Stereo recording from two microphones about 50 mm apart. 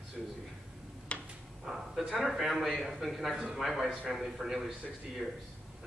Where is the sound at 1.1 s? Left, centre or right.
Left.